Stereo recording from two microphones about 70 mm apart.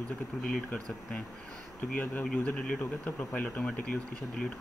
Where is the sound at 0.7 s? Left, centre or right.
Centre.